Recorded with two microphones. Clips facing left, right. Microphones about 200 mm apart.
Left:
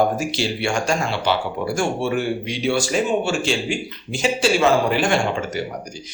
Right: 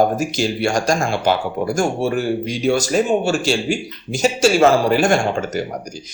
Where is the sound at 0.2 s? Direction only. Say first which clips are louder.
Right 4 dB; 45° right (ahead or behind).